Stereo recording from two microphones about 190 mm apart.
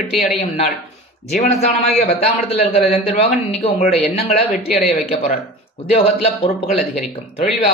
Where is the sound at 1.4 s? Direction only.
35° left (ahead or behind).